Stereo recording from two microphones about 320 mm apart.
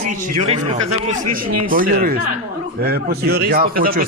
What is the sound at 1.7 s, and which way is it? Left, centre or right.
A man's voice, right.